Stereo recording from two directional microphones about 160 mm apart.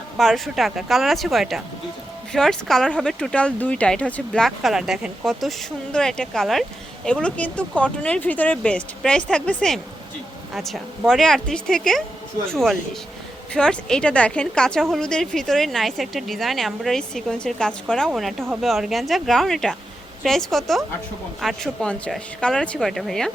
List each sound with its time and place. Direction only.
0.2 s speech: centre (ahead or behind)